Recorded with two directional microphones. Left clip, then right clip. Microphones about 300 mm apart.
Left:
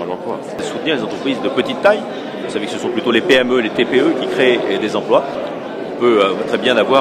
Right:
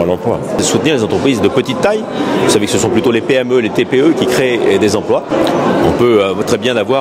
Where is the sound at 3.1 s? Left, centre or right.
Right.